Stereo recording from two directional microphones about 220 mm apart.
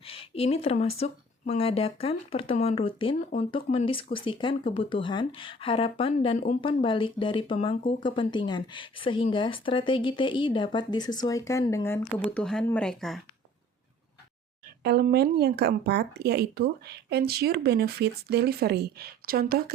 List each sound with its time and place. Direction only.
0.0 s speech: 25° left (ahead or behind); by 13.2 s centre (ahead or behind)
14.8 s speech: 45° right (ahead or behind)